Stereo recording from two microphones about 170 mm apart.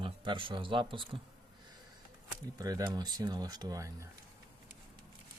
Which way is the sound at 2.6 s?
20° right (ahead or behind).